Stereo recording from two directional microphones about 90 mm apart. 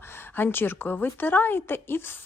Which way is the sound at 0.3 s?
25° left (ahead or behind).